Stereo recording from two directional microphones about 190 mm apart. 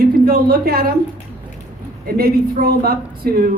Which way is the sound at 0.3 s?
55° right (ahead or behind).